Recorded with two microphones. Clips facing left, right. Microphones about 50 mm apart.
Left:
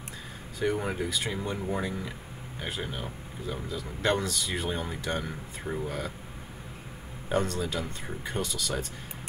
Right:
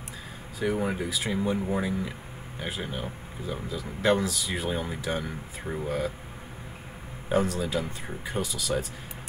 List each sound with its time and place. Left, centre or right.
0.6 s speech: centre
7.2 s speech: centre